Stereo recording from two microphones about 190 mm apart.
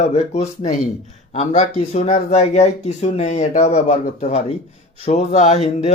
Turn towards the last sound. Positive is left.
turn(degrees=35)  # may be behind; listen again after turning